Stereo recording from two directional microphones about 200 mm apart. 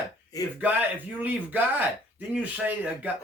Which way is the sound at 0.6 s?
10° right (ahead or behind).